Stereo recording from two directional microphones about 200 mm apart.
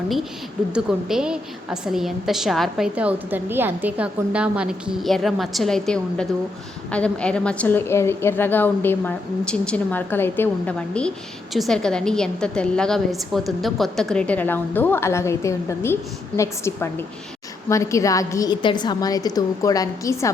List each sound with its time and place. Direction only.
0.7 s a woman's voice: centre (ahead or behind); by 20.3 s 15° left (ahead or behind)